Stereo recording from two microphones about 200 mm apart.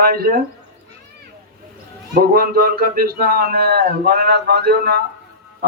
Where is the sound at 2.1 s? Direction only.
50° right (ahead or behind).